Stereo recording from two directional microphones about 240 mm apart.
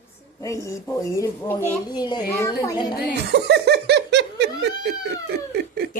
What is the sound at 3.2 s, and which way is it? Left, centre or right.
Speech, right.